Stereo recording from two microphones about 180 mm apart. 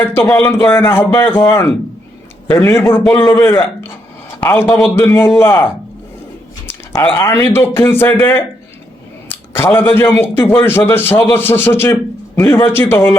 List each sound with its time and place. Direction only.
0.0 s a man's voice: 10° left (ahead or behind)
3.0 s a man's voice: centre (ahead or behind)
3.2 s a man's voice: 20° left (ahead or behind)
4.4 s speech: 10° left (ahead or behind)
6.7 s a man's voice: 15° left (ahead or behind)